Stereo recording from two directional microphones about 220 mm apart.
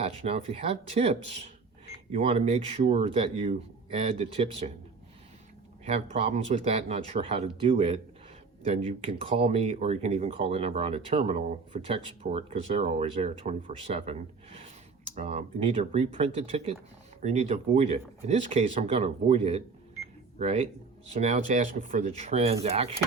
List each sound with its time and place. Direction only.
0.0 s speech: 30° right (ahead or behind)
5.8 s speech: 30° right (ahead or behind)